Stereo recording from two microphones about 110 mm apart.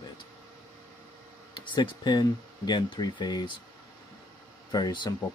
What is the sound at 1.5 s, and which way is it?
Speech, 45° left (ahead or behind).